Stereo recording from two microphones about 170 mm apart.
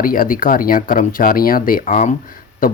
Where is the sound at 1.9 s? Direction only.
45° left (ahead or behind).